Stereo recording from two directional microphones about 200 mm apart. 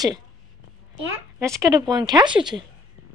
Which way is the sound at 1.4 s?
15° right (ahead or behind).